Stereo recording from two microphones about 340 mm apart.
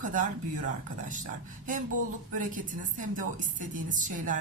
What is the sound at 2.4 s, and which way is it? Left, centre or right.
A woman's voice, right.